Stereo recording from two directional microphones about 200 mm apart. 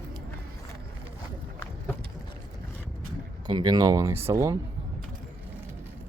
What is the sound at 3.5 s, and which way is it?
Speech, 20° right (ahead or behind).